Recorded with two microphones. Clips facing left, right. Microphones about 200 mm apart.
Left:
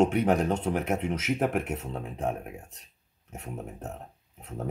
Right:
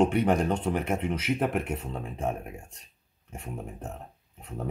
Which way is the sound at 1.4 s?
10° left (ahead or behind).